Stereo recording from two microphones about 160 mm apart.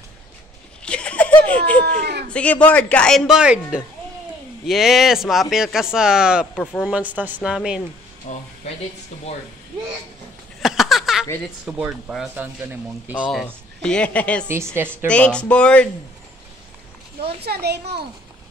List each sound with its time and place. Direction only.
0.8 s a sound: 5° left (ahead or behind)
2.3 s speech: 10° left (ahead or behind)
6.5 s speech: 5° left (ahead or behind)
6.9 s speech: 10° right (ahead or behind)
8.3 s speech: 45° left (ahead or behind)
10.6 s a sound: centre (ahead or behind)
11.6 s speech: 5° right (ahead or behind)
14.5 s speech: 15° right (ahead or behind)
15.0 s speech: 5° left (ahead or behind)
17.2 s a child's voice: 90° right